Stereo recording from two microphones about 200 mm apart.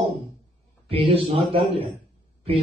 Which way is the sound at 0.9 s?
25° right (ahead or behind).